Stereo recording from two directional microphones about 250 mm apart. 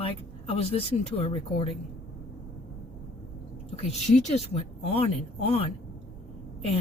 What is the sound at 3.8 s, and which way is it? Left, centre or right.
Speech, left.